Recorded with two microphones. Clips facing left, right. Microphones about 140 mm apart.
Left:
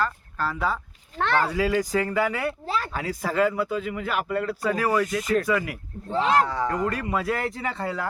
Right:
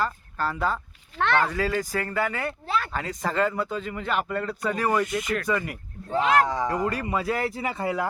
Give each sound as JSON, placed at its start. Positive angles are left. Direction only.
{"t": 0.0, "sound": "speech", "side_deg": 0}
{"t": 1.1, "sound": "a sound", "side_deg": 40}
{"t": 1.5, "sound": "speech", "side_deg": 10}
{"t": 2.6, "sound": "a sound", "side_deg": 35}
{"t": 2.9, "sound": "speech", "side_deg": 5}
{"t": 5.2, "sound": "speech", "side_deg": 35}
{"t": 5.5, "sound": "speech", "side_deg": 5}
{"t": 6.4, "sound": "speech", "side_deg": -15}
{"t": 6.7, "sound": "speech", "side_deg": 0}